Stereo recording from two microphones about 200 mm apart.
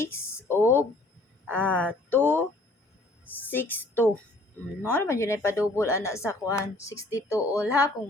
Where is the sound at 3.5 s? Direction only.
10° left (ahead or behind).